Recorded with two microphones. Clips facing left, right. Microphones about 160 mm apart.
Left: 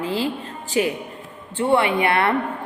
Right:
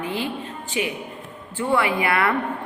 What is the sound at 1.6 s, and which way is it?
Speech, 25° left (ahead or behind).